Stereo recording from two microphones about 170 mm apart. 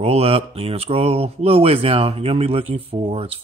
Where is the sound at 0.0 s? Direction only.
35° right (ahead or behind).